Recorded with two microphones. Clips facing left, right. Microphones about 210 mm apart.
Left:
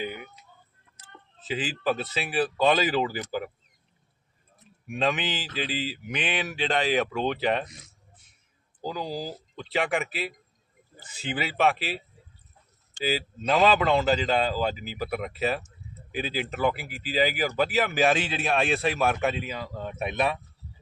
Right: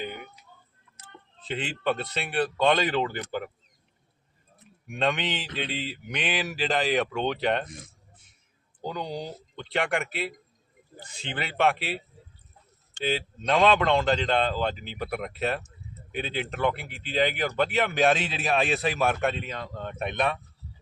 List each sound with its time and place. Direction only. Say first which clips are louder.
0.0 s a sound: left 2 dB; 5° left (ahead or behind)
1.4 s speech: left 2 dB; 5° left (ahead or behind)
4.9 s speech: even; centre (ahead or behind)
7.7 s speech: right 7 dB; 50° right (ahead or behind)
8.8 s speech: left 1 dB; 5° left (ahead or behind)